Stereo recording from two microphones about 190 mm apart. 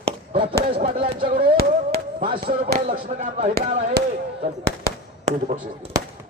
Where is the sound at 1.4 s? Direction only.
50° right (ahead or behind).